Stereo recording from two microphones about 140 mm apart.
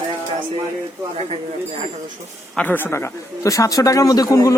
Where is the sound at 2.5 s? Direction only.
10° left (ahead or behind).